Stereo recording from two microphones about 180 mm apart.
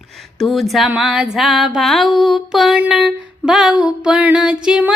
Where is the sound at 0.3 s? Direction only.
Centre (ahead or behind).